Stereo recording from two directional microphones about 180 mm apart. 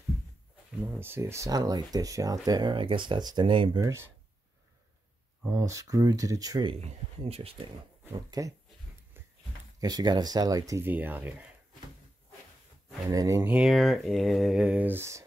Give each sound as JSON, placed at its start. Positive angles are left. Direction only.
{"t": 0.9, "sound": "speech", "side_deg": -10}
{"t": 3.8, "sound": "speech", "side_deg": -15}
{"t": 5.5, "sound": "speech", "side_deg": -15}
{"t": 7.2, "sound": "speech", "side_deg": -35}
{"t": 8.1, "sound": "speech", "side_deg": -20}
{"t": 9.8, "sound": "speech", "side_deg": -20}
{"t": 13.0, "sound": "speech", "side_deg": -20}